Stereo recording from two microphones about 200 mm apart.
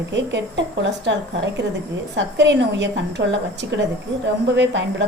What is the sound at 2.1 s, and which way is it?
A woman's voice, 60° right (ahead or behind).